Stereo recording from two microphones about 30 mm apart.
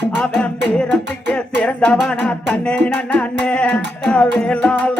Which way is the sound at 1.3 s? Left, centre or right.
Left.